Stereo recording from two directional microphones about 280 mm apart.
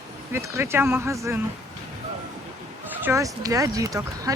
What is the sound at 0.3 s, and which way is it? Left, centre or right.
Speech, centre.